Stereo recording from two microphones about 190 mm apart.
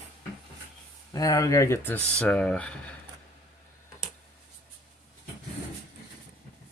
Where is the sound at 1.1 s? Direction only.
20° left (ahead or behind).